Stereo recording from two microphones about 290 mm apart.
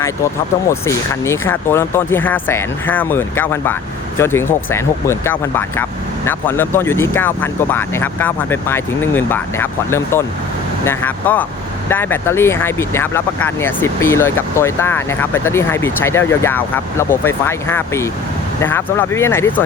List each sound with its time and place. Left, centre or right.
0.7 s speech: centre